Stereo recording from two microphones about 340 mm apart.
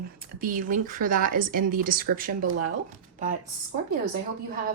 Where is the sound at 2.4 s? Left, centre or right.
Right.